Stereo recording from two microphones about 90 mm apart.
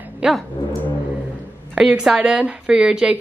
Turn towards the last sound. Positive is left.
turn(degrees=-10)  # may be behind; listen again after turning